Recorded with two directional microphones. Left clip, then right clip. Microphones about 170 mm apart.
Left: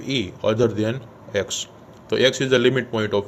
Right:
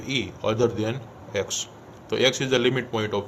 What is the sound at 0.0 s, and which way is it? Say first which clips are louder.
Speech: left 4 dB; 30° left (ahead or behind).